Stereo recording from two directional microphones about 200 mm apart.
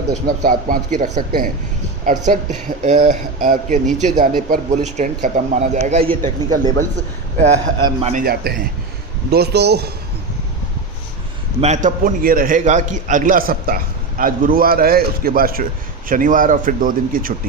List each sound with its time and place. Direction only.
0.3 s a man's voice: 45° right (ahead or behind)
8.2 s a man's voice: 50° right (ahead or behind)
11.6 s a man's voice: 35° right (ahead or behind)